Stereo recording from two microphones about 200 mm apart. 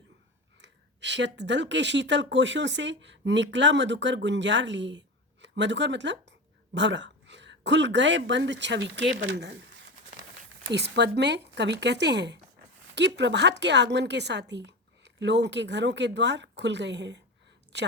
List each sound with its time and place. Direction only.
0.6 s a woman's voice: 60° right (ahead or behind)
10.7 s a woman's voice: 60° right (ahead or behind)